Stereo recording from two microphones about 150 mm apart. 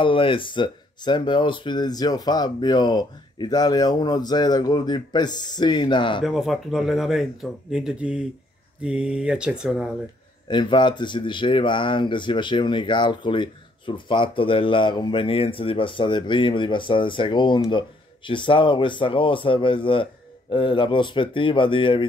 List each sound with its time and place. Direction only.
0.0 s speech: 35° left (ahead or behind)
6.2 s speech: centre (ahead or behind)
10.5 s speech: 30° left (ahead or behind)